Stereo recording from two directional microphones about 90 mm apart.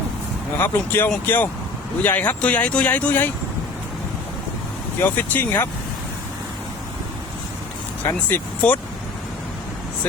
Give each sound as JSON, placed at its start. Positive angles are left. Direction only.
{"t": 0.6, "sound": "speech", "side_deg": 25}
{"t": 4.9, "sound": "speech", "side_deg": 20}
{"t": 8.0, "sound": "speech", "side_deg": 20}